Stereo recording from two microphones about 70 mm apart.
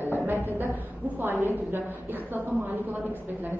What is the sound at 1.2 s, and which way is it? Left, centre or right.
A woman's voice, right.